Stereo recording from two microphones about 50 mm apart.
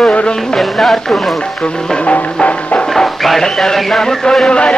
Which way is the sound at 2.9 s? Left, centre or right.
Centre.